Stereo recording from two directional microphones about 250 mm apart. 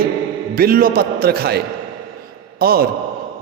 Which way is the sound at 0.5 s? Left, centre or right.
Right.